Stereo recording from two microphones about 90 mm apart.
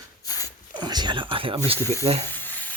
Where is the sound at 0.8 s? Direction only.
55° right (ahead or behind); by 1.5 s 70° right (ahead or behind).